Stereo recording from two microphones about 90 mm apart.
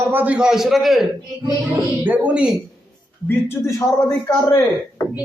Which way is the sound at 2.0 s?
20° right (ahead or behind).